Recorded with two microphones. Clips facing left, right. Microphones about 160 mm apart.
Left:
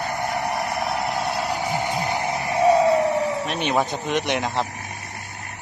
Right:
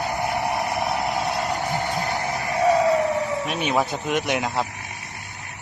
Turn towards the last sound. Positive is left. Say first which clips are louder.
# even
turn(degrees=-5)  # may be behind; listen again after turning